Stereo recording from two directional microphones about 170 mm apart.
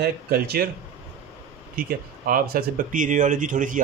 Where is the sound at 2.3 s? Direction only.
60° right (ahead or behind).